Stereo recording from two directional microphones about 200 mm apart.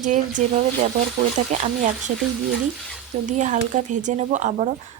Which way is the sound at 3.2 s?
35° right (ahead or behind).